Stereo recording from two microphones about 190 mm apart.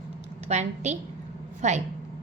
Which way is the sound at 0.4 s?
35° right (ahead or behind).